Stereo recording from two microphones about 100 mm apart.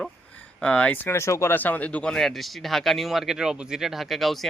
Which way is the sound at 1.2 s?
30° left (ahead or behind).